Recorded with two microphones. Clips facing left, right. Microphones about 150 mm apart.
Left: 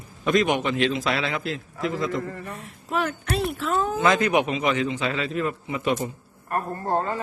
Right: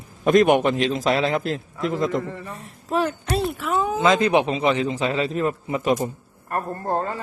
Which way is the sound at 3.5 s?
15° right (ahead or behind).